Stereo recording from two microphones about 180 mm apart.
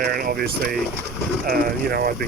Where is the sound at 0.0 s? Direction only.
55° right (ahead or behind).